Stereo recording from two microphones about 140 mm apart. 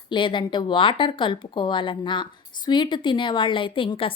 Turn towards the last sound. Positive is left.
turn(degrees=40)  # may be behind; listen again after turning